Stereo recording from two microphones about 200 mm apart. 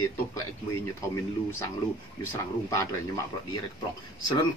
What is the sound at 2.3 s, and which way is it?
Speech, 15° left (ahead or behind).